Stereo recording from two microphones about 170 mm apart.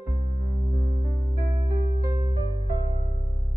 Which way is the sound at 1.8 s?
40° right (ahead or behind).